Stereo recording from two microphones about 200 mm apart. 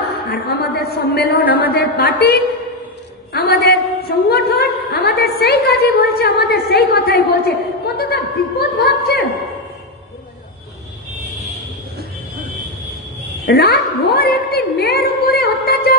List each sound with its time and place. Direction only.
0.3 s a woman's voice: 50° left (ahead or behind)
1.4 s a man's voice: 10° right (ahead or behind)
1.8 s a woman's voice: 50° left (ahead or behind)
3.3 s a woman's voice: 50° left (ahead or behind)
13.5 s a woman's voice: 50° left (ahead or behind)